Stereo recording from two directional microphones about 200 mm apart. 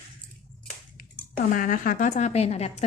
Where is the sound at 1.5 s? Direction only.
45° left (ahead or behind).